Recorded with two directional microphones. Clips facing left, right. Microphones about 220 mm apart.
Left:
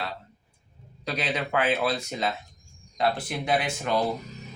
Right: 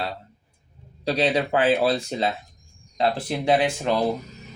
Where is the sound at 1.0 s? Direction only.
30° right (ahead or behind).